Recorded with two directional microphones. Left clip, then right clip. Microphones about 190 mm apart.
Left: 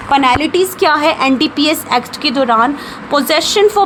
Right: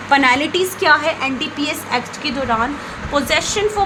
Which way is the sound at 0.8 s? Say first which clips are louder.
Left 3 dB; 45° left (ahead or behind).